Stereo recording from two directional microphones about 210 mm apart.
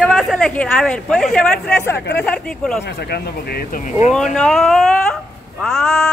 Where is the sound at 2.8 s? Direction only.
50° left (ahead or behind).